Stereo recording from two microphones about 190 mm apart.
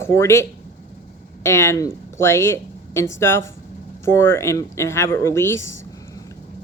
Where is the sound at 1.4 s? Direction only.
15° left (ahead or behind).